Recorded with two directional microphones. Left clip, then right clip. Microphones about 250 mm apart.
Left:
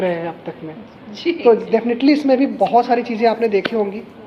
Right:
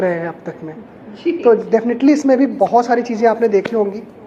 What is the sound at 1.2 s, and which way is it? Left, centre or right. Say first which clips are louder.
Speech: right 1 dB; left.